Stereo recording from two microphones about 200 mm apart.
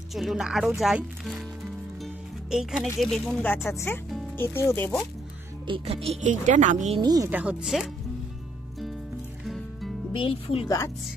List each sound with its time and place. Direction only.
0.1 s speech: centre (ahead or behind)
2.5 s speech: centre (ahead or behind)
3.5 s speech: 10° left (ahead or behind)
5.7 s speech: 30° right (ahead or behind)
7.0 s speech: 20° right (ahead or behind)
7.2 s speech: 5° right (ahead or behind)
9.5 s music: centre (ahead or behind)
10.1 s speech: 25° left (ahead or behind)